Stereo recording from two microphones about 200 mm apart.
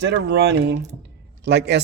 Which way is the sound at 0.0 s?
60° right (ahead or behind).